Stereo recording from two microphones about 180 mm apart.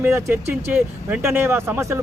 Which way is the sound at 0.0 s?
15° right (ahead or behind).